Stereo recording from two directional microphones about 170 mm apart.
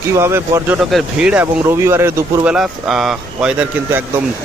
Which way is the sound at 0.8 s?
Centre (ahead or behind).